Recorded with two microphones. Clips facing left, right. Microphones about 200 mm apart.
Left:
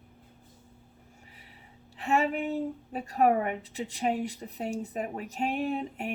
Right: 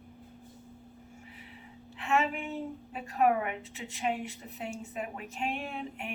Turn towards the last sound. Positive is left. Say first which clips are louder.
# left 7 dB
turn(degrees=40)  # may be behind; listen again after turning